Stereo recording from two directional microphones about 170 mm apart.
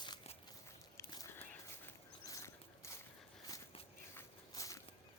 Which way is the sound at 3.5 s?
20° left (ahead or behind).